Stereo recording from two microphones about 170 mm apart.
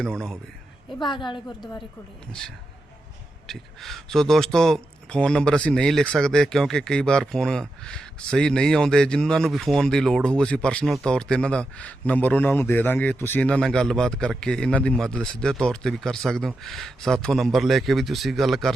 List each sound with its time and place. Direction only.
0.0 s speech: 5° left (ahead or behind)
1.2 s a woman's voice: 25° left (ahead or behind)
3.4 s speech: centre (ahead or behind)